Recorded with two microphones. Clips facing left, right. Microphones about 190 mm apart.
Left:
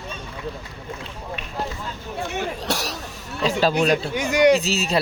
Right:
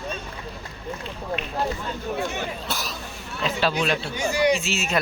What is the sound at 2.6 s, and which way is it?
Cough, 75° left (ahead or behind).